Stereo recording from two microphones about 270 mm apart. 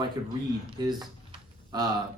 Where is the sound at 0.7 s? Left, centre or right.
Centre.